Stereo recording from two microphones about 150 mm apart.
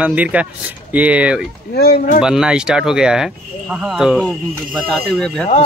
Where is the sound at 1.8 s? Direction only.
90° left.